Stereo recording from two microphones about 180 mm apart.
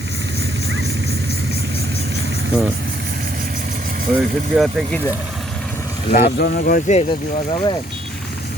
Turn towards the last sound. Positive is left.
turn(degrees=25)  # may be behind; listen again after turning